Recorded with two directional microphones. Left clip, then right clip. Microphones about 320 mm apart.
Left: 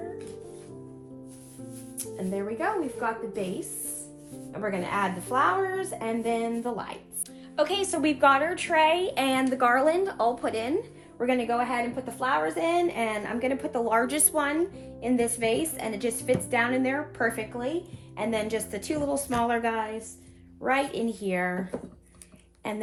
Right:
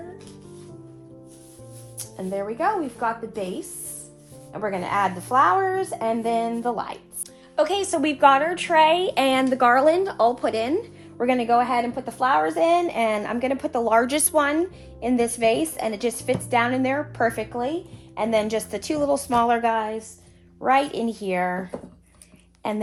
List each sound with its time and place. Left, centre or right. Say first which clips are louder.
2.0 s a woman's voice: right 4 dB; centre
4.6 s a woman's voice: right 5 dB; centre
22.6 s a woman's voice: right 6 dB; right